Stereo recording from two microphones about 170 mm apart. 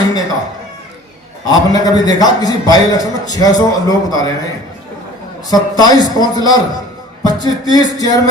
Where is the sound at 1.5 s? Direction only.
25° left (ahead or behind).